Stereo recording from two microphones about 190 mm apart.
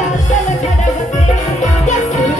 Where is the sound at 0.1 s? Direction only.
40° left (ahead or behind).